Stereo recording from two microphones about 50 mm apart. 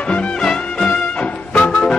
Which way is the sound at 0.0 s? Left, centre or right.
Left.